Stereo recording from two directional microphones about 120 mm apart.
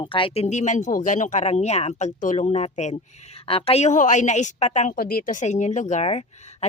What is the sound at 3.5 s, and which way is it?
A woman's voice, 55° left (ahead or behind).